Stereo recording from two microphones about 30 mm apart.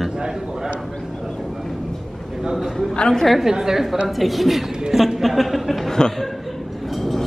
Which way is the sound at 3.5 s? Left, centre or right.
Centre.